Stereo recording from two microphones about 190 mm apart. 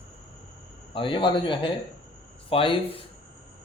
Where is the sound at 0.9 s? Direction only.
25° left (ahead or behind).